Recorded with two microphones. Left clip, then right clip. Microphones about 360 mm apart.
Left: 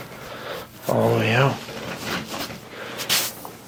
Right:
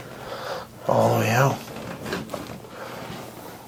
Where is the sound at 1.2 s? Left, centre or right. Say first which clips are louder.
Left 1 dB; right.